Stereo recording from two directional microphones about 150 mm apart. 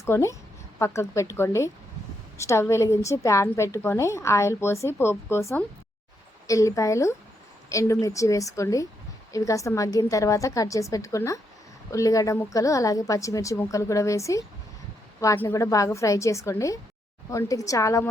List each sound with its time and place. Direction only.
0.0 s a woman's voice: 20° left (ahead or behind)